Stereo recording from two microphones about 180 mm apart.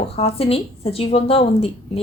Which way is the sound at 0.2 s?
35° left (ahead or behind).